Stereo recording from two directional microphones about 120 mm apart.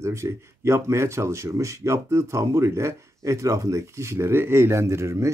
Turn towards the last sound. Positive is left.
turn(degrees=-25)  # may be behind; listen again after turning